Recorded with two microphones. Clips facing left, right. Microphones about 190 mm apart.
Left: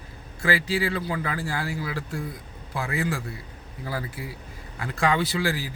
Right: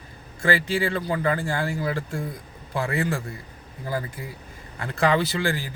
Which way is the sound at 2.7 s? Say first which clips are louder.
Right 3 dB; centre (ahead or behind).